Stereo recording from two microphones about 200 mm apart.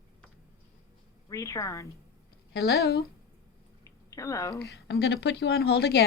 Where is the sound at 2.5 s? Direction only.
55° left (ahead or behind).